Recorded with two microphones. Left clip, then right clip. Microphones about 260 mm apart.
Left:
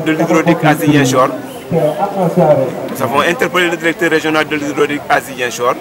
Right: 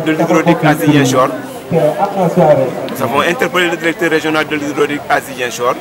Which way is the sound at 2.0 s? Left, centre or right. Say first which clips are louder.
Right 1 dB; right.